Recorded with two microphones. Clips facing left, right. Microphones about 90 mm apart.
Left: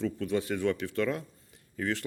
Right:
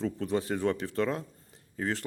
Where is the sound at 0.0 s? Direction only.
35° right (ahead or behind).